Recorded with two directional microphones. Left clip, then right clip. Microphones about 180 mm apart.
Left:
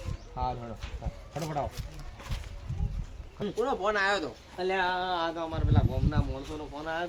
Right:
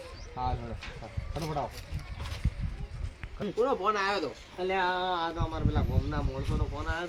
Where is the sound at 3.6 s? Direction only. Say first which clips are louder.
Even; 5° left (ahead or behind).